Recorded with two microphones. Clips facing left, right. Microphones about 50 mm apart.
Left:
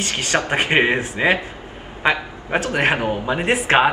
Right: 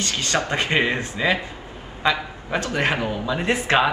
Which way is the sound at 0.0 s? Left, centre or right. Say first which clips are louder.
Left 2 dB; left.